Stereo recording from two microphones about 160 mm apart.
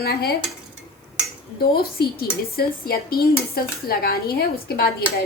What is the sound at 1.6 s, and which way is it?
A woman's voice, 75° left (ahead or behind).